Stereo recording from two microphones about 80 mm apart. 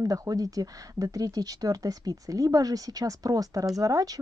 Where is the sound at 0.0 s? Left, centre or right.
Right.